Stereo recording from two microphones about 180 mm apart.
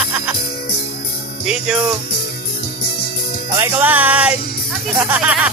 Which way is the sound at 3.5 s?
15° right (ahead or behind).